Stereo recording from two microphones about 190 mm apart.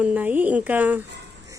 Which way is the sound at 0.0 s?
5° right (ahead or behind).